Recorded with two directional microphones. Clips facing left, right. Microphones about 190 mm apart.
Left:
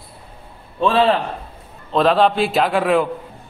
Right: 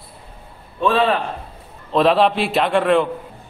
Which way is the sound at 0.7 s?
30° left (ahead or behind).